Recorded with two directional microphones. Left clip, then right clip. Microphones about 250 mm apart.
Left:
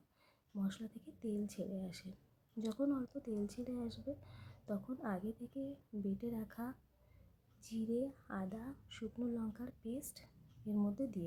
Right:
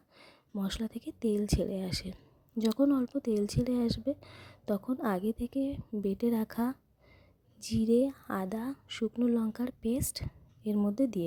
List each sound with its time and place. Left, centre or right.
0.2 s speech: right